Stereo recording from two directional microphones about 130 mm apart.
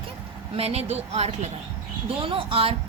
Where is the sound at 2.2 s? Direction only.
45° right (ahead or behind).